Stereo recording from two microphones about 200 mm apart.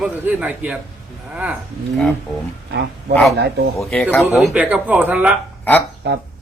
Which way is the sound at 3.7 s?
5° left (ahead or behind).